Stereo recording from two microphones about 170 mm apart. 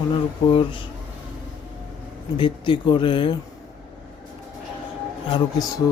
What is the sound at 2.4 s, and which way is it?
Speech, 30° left (ahead or behind).